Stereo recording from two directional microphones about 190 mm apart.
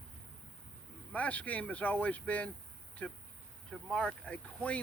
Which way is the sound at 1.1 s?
10° left (ahead or behind).